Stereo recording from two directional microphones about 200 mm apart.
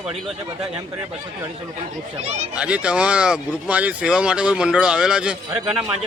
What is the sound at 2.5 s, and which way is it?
Speech, 5° right (ahead or behind).